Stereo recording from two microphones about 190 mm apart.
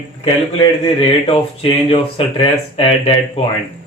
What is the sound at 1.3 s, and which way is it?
A man's voice, 30° left (ahead or behind).